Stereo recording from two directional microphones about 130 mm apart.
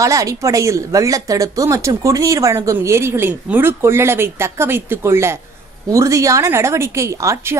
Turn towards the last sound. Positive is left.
turn(degrees=-25)  # may be behind; listen again after turning